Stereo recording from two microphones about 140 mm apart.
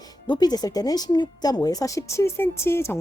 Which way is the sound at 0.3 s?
30° left (ahead or behind).